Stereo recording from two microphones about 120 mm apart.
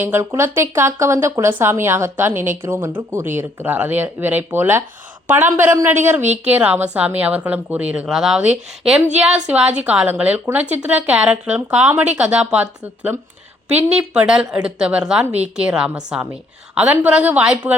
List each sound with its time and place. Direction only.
0.0 s speech: 20° right (ahead or behind)